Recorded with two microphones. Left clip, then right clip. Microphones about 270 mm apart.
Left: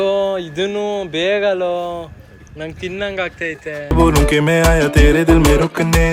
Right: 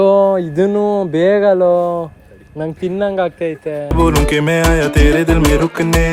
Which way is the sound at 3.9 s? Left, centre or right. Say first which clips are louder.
Left 1 dB; centre.